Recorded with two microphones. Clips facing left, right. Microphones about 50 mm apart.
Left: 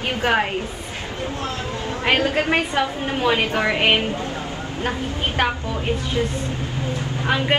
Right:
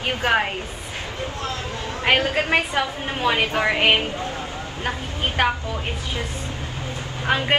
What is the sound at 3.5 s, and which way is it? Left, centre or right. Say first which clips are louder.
Speech: even; right.